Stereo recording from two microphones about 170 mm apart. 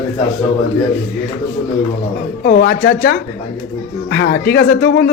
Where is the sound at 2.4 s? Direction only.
75° left (ahead or behind).